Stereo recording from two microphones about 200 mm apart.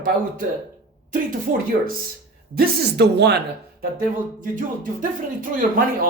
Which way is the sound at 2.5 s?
55° right (ahead or behind).